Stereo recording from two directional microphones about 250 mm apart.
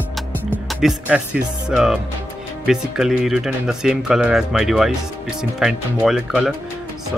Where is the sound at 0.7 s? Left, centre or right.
Centre.